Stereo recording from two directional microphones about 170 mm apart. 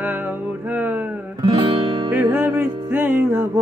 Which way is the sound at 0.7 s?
10° right (ahead or behind).